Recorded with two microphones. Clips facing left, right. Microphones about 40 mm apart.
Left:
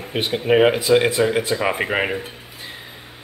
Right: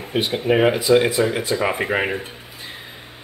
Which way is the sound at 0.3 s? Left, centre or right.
Centre.